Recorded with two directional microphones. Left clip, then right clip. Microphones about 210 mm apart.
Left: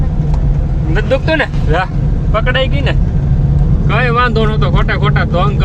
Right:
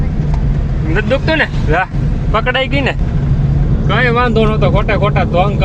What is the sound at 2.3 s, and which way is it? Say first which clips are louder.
Speech: right 1 dB; 50° right (ahead or behind).